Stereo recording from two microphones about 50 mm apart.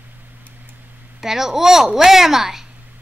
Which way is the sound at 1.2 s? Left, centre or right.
Centre.